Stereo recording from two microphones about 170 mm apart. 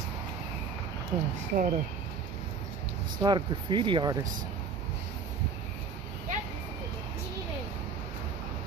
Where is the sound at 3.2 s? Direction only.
25° right (ahead or behind).